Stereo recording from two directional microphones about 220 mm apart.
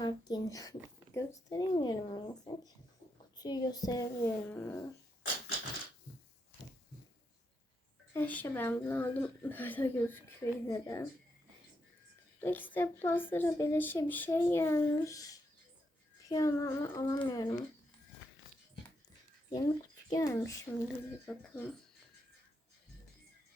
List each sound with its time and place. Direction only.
0.0 s a woman's voice: 15° left (ahead or behind)
1.1 s a sound: 15° left (ahead or behind)
3.3 s a woman's voice: 20° left (ahead or behind)
8.1 s a woman's voice: 10° left (ahead or behind)
12.4 s a woman's voice: 10° left (ahead or behind)
19.5 s speech: 15° left (ahead or behind)
20.8 s speech: 5° left (ahead or behind)